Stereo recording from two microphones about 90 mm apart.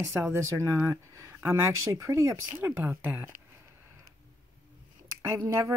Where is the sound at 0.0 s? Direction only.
30° right (ahead or behind).